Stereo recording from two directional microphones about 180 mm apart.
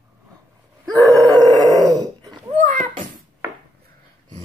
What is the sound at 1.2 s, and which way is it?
Howl, 20° right (ahead or behind).